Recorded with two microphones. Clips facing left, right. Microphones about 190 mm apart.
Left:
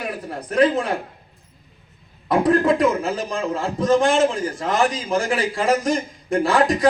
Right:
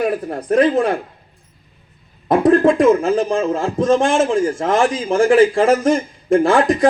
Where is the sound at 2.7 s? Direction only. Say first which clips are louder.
Right 7 dB; 45° right (ahead or behind).